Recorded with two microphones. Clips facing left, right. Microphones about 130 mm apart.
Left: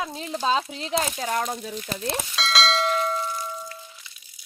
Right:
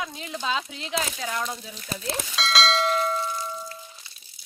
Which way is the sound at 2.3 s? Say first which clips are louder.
Right 1 dB; centre (ahead or behind).